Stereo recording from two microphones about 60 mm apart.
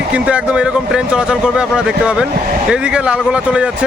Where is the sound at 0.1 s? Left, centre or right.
Centre.